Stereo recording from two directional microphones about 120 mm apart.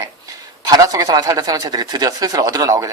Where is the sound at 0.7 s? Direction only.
30° right (ahead or behind).